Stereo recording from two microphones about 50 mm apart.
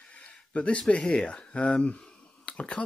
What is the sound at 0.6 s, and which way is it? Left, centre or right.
Speech, left.